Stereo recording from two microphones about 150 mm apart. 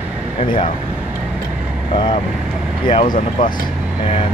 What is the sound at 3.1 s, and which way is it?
Speech, 60° left (ahead or behind).